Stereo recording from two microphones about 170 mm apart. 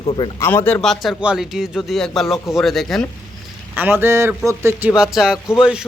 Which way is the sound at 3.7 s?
10° right (ahead or behind).